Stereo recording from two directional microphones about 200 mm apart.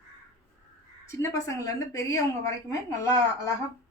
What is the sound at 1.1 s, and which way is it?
Speech, 15° left (ahead or behind).